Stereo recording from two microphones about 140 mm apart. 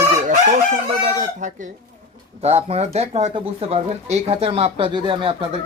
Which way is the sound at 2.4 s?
50° right (ahead or behind).